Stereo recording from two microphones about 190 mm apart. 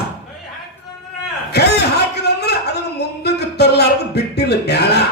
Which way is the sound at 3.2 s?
60° left (ahead or behind).